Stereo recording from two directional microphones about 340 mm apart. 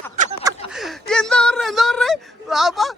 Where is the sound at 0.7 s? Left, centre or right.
Centre.